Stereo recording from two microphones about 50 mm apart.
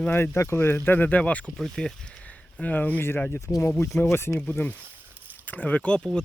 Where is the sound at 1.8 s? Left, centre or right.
Centre.